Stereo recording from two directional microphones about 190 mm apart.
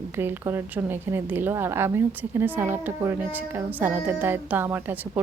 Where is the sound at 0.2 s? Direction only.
10° right (ahead or behind).